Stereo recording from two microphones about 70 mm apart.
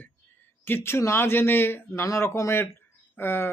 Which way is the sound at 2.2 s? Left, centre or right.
Left.